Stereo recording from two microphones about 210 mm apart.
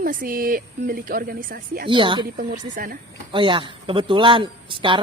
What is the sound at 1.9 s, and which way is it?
Speech, 25° right (ahead or behind).